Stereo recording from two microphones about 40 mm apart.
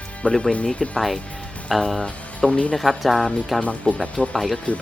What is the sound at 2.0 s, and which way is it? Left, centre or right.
Speech, left.